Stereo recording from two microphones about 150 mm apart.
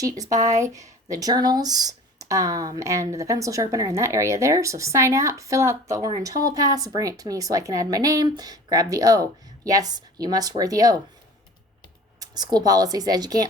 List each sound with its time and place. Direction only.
0.3 s speech: 50° right (ahead or behind)
0.6 s speech: 20° right (ahead or behind)
12.2 s speech: 25° right (ahead or behind)